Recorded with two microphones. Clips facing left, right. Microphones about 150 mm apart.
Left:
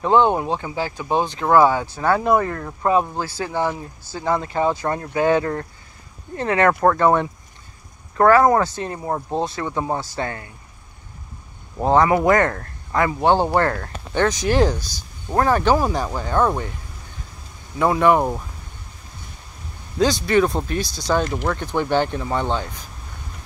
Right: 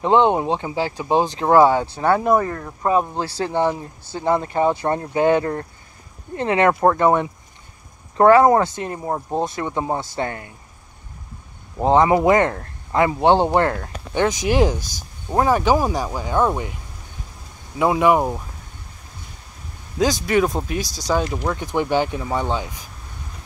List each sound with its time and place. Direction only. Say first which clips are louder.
0.0 s a man's voice: right 1 dB; 25° right (ahead or behind); by 3.2 s 10° right (ahead or behind)
3.2 s a man's voice: right 2 dB; 30° right (ahead or behind)
9.0 s a man's voice: even; 10° right (ahead or behind)
11.8 s a man's voice: right 1 dB; 20° right (ahead or behind)
14.8 s speech: right 1 dB; 45° right (ahead or behind)
15.3 s speech: even; 10° right (ahead or behind)
17.7 s speech: even; 15° right (ahead or behind)
20.2 s speech: left 1 dB; 5° right (ahead or behind)